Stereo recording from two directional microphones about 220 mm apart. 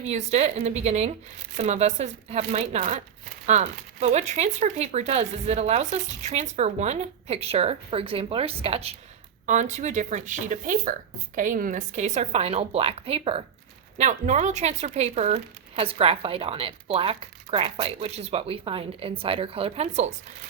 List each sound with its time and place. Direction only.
0.0 s speech: 30° right (ahead or behind)